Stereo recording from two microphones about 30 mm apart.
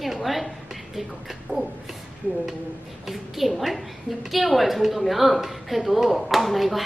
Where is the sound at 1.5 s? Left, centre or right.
Right.